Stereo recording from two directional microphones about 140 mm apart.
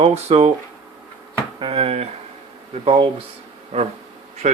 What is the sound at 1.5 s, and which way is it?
Speech, 40° right (ahead or behind).